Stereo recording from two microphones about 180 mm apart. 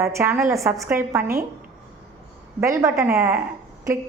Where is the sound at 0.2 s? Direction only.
15° right (ahead or behind).